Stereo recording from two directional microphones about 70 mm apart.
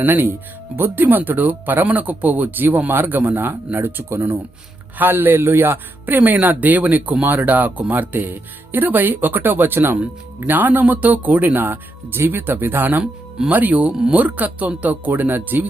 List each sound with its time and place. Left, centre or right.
0.0 s a man's voice: right